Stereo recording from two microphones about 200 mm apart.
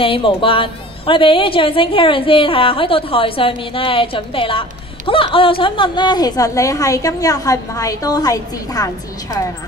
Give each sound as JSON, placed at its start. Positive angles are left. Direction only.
{"t": 0.0, "sound": "a woman's voice", "side_deg": 25}